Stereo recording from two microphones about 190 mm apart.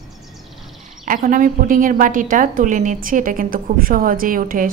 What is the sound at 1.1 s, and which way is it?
A woman's voice, 45° right (ahead or behind).